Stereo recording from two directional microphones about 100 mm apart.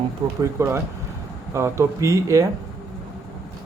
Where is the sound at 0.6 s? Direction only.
30° right (ahead or behind).